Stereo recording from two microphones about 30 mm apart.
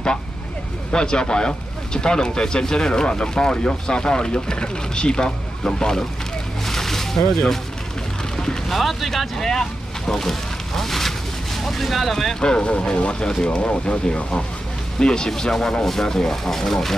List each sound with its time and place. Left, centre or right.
0.9 s speech: left
6.7 s a sound: centre
8.6 s speech: centre
9.4 s vehicle: centre
11.6 s speech: centre
12.4 s speech: left
15.0 s speech: left
15.8 s speech: centre